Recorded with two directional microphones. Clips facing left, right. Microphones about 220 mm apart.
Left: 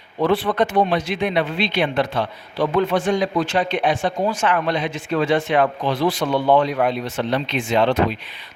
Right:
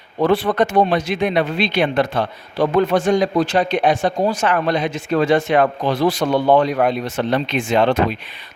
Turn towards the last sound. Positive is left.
turn(degrees=-50)  # may be behind; listen again after turning